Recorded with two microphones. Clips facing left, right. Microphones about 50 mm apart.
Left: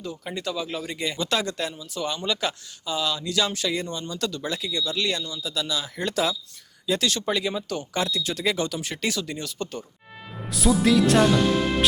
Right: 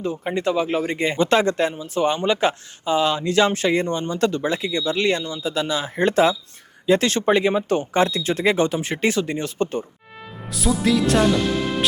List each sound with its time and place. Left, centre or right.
0.0 s speech: right
10.5 s speech: centre